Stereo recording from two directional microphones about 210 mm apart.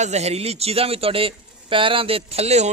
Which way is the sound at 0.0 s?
30° right (ahead or behind).